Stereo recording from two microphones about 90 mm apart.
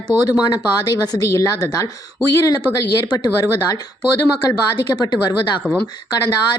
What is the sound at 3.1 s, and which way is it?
Speech, 45° left (ahead or behind).